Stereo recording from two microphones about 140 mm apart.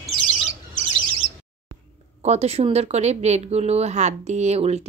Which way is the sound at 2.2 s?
50° right (ahead or behind).